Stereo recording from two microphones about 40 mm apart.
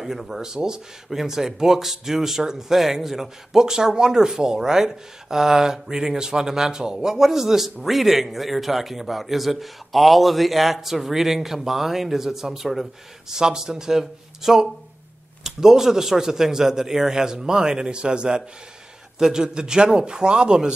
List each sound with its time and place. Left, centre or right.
0.0 s a man's voice: centre